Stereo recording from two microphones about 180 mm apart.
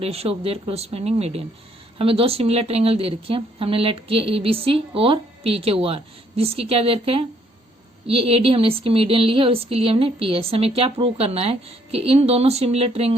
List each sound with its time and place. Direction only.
0.0 s speech: 35° right (ahead or behind)